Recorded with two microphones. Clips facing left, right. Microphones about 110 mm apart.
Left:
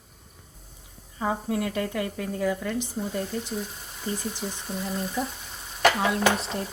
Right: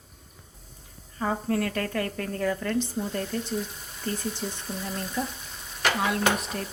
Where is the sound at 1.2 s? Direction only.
10° left (ahead or behind).